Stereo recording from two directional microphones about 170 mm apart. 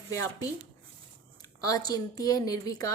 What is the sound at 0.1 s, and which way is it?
Speech, 20° left (ahead or behind).